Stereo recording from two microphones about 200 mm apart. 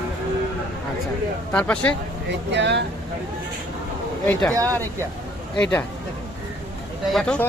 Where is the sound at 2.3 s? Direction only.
60° right (ahead or behind).